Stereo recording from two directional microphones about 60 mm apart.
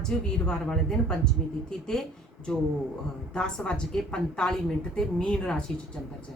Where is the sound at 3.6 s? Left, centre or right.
Centre.